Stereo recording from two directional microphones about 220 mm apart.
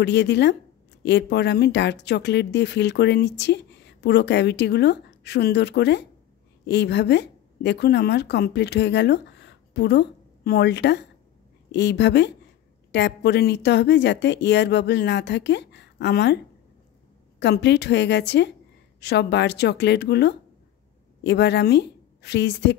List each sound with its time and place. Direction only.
0.0 s a woman's voice: 50° left (ahead or behind)
17.4 s a woman's voice: 50° left (ahead or behind)